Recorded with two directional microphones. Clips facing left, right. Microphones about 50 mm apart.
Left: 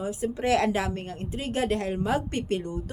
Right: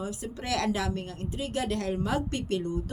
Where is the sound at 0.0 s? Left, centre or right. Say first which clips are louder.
Left 7 dB; left.